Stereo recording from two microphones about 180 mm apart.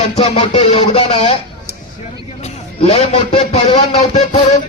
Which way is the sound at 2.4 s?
35° left (ahead or behind).